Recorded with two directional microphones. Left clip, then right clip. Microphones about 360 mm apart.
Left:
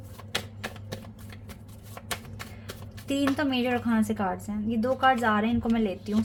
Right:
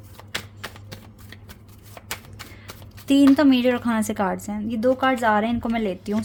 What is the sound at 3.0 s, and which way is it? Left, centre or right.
A woman's voice, right.